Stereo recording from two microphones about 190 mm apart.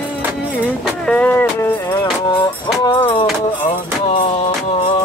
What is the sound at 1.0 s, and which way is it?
Music, 5° left (ahead or behind).